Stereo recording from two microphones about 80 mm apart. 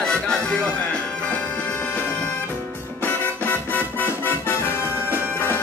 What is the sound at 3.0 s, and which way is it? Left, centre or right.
Music, left.